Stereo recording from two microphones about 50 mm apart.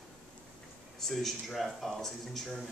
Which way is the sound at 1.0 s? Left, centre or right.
Centre.